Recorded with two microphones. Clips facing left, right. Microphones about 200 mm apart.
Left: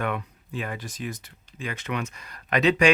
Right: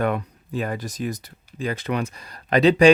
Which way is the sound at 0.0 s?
40° right (ahead or behind).